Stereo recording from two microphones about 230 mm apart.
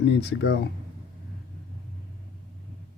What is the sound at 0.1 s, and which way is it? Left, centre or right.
Speech, left.